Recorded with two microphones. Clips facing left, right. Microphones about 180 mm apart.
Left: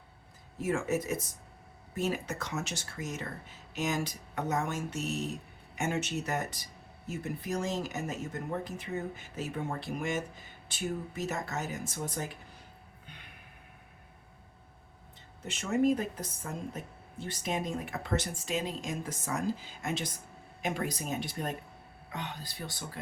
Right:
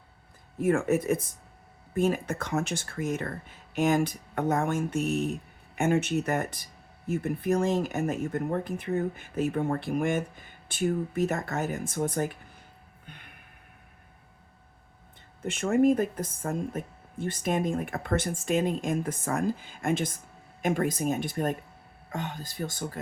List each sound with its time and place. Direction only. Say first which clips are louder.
0.6 s speech: right 6 dB; 55° right (ahead or behind)
15.4 s speech: right 5 dB; 50° right (ahead or behind)